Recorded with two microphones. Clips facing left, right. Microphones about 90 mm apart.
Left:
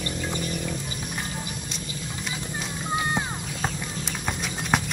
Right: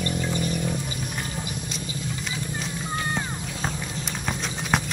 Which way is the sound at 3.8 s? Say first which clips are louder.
Even; centre (ahead or behind).